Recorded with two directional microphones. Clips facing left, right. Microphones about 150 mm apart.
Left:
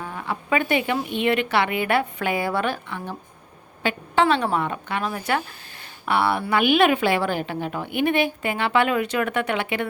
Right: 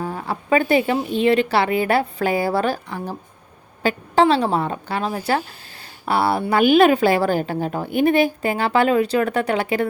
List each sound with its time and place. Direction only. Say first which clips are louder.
0.0 s a woman's voice: right 4 dB; 35° right (ahead or behind)